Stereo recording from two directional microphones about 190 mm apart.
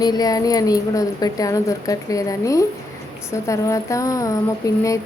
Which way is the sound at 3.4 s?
15° left (ahead or behind).